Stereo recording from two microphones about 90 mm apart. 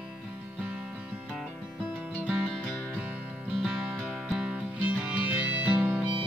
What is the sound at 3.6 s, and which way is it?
Music, 5° right (ahead or behind).